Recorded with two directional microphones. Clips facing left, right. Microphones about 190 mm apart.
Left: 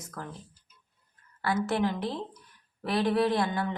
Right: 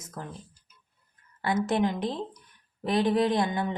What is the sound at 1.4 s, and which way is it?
Speech, 20° right (ahead or behind).